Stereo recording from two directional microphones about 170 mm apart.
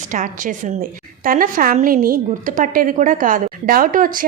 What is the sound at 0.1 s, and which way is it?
A woman's voice, 50° right (ahead or behind).